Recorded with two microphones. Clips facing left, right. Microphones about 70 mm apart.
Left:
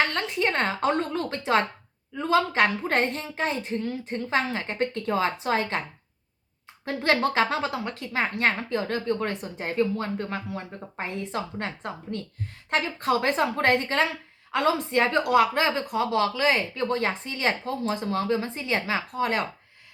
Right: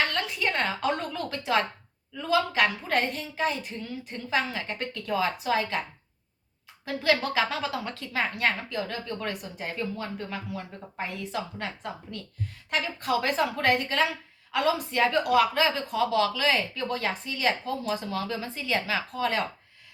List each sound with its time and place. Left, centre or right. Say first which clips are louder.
0.1 s a woman's voice: left 3 dB; left
6.8 s a woman's voice: left 2 dB; left